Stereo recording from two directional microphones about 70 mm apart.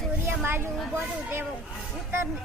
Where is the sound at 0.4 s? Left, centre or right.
Right.